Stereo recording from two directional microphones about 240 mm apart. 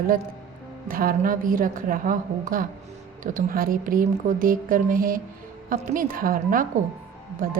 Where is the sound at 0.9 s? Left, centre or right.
Right.